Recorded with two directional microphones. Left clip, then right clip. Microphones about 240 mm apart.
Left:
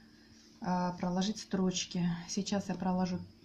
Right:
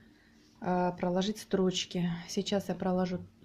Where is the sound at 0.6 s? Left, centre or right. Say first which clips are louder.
Right 4 dB; right.